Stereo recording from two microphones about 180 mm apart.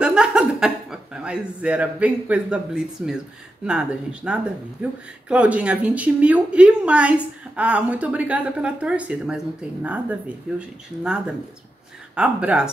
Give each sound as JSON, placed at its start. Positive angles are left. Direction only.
{"t": 0.0, "sound": "a woman's voice", "side_deg": -5}